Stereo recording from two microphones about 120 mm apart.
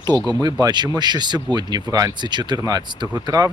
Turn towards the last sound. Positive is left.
turn(degrees=-30)  # may be behind; listen again after turning